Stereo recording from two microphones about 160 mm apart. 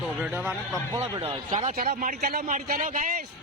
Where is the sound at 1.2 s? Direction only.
40° right (ahead or behind).